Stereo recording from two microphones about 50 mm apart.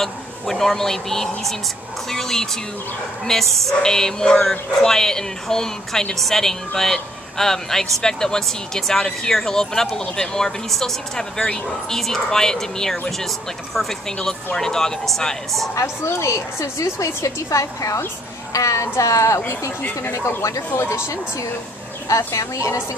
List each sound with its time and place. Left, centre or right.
0.0 s speech: centre
15.7 s a woman's voice: left
16.1 s a woman's voice: left
20.0 s speech: left
22.0 s a woman's voice: left